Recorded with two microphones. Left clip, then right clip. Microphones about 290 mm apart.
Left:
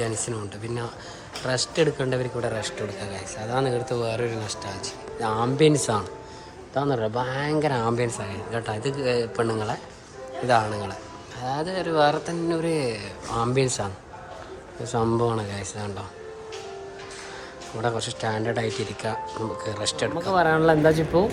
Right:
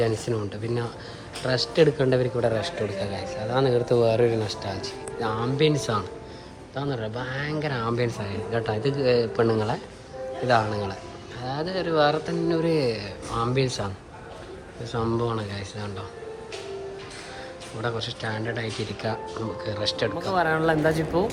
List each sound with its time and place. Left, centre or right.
0.0 s speech: centre
5.2 s speech: centre
14.9 s speech: centre
17.8 s speech: centre
20.1 s speech: centre